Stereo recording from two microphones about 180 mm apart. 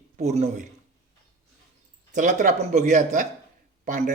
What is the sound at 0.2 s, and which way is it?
Speech, 40° right (ahead or behind).